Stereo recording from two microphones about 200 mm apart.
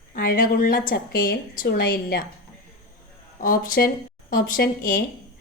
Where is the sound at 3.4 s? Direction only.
45° left (ahead or behind).